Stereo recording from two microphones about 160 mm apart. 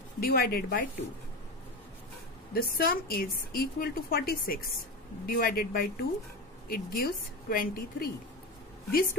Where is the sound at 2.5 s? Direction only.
65° left (ahead or behind).